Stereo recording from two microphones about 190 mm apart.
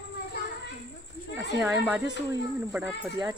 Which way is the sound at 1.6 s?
5° right (ahead or behind).